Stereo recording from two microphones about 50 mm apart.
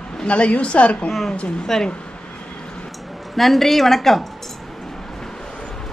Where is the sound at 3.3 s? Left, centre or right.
Centre.